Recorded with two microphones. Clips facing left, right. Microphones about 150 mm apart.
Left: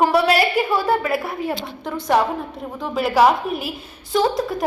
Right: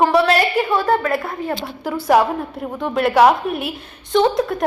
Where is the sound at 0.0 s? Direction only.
10° left (ahead or behind).